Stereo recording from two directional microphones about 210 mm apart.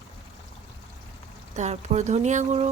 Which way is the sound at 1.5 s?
30° right (ahead or behind).